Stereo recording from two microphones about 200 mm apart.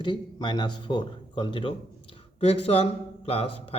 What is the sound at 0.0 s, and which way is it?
A man's voice, 25° left (ahead or behind).